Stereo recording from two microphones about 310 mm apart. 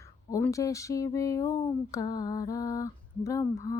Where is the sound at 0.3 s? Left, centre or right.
Centre.